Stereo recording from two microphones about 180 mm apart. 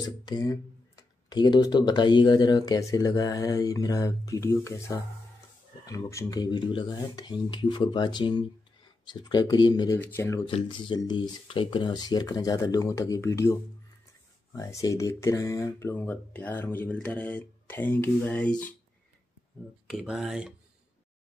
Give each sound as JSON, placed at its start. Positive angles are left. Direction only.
{"t": 0.0, "sound": "speech", "side_deg": 20}
{"t": 9.9, "sound": "speech", "side_deg": 10}
{"t": 10.4, "sound": "speech", "side_deg": 25}
{"t": 19.9, "sound": "speech", "side_deg": -5}